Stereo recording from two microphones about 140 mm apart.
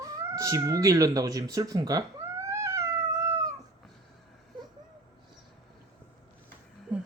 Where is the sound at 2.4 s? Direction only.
20° right (ahead or behind).